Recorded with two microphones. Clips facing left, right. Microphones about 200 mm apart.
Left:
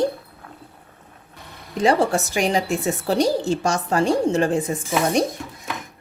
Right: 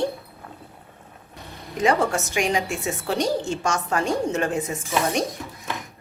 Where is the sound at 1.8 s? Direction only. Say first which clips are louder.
Left 3 dB; 30° left (ahead or behind).